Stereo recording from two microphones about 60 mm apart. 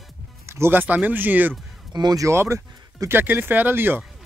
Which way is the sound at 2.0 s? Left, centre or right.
Right.